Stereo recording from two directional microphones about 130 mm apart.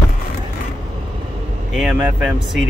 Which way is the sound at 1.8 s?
5° right (ahead or behind).